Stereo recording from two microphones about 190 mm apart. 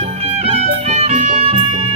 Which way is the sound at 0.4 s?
35° right (ahead or behind).